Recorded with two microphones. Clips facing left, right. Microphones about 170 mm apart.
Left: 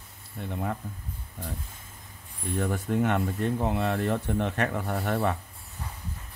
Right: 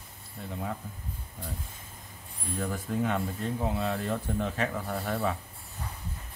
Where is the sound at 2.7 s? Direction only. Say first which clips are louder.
Left 3 dB; 65° left (ahead or behind).